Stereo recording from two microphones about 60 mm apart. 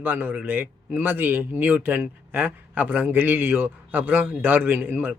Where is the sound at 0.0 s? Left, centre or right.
Right.